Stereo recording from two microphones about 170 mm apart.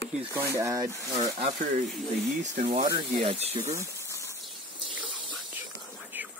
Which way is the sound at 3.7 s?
15° right (ahead or behind).